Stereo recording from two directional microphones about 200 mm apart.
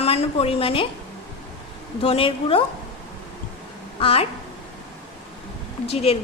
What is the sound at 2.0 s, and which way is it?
Speech, 25° left (ahead or behind).